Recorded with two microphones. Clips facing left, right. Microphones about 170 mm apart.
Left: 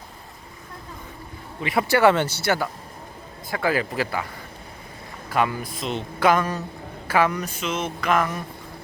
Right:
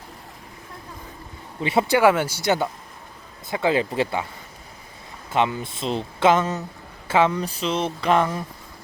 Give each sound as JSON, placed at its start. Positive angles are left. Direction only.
{"t": 1.9, "sound": "a man's voice", "side_deg": -10}
{"t": 5.3, "sound": "a man's voice", "side_deg": -25}
{"t": 7.1, "sound": "a sound", "side_deg": -25}